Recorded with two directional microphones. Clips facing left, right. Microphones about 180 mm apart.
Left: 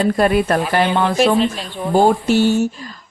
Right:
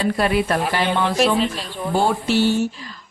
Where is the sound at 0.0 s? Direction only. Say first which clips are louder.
Left 4 dB; 45° left (ahead or behind).